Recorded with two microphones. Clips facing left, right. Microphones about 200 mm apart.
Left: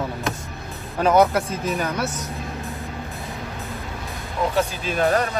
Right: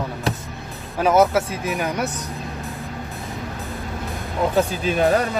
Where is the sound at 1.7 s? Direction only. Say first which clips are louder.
Right 1 dB; 15° right (ahead or behind).